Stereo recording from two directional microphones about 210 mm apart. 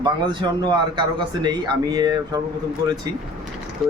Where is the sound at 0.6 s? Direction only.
20° right (ahead or behind).